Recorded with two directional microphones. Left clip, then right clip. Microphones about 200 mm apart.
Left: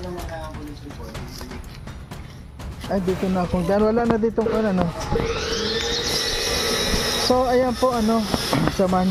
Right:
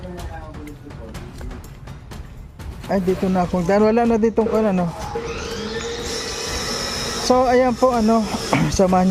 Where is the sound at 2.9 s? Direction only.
30° right (ahead or behind).